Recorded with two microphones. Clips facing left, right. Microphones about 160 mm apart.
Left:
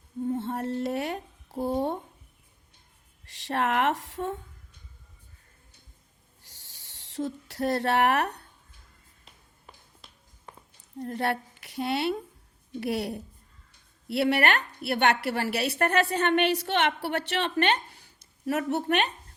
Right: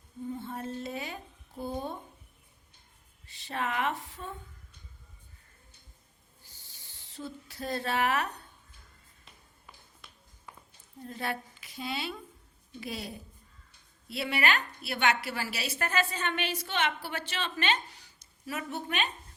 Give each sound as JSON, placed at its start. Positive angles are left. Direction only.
{"t": 0.3, "sound": "speech", "side_deg": 70}
{"t": 3.2, "sound": "speech", "side_deg": 80}
{"t": 6.4, "sound": "owl", "side_deg": 80}
{"t": 11.0, "sound": "a woman's voice", "side_deg": 65}